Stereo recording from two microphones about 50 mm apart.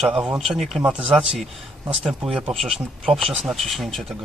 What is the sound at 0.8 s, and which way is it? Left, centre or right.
Speech, right.